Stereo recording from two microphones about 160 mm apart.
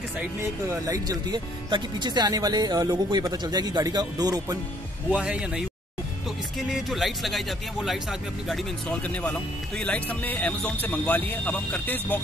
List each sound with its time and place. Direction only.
0.7 s speech: 20° right (ahead or behind)
5.2 s speech: 5° right (ahead or behind)
6.7 s speech: centre (ahead or behind)